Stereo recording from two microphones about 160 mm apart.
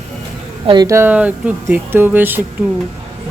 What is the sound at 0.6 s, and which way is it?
Speech, 25° right (ahead or behind).